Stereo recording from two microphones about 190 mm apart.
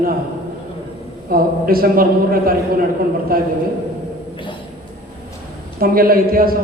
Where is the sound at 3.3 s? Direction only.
50° right (ahead or behind).